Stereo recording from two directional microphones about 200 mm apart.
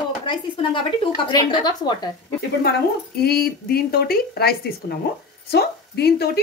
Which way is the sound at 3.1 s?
50° left (ahead or behind).